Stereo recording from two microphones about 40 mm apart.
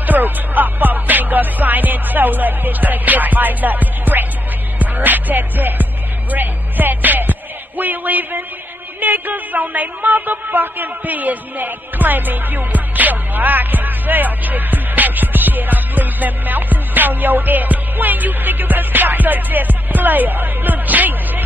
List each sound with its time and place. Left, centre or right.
0.0 s music: right
9.0 s a man's voice: right